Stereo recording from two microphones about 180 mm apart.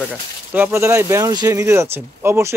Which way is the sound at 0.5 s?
10° right (ahead or behind).